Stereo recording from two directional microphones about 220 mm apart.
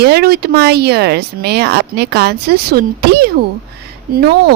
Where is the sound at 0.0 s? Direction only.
45° right (ahead or behind).